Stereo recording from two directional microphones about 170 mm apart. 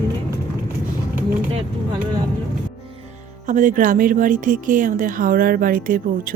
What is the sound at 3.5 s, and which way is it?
Speech, 50° right (ahead or behind).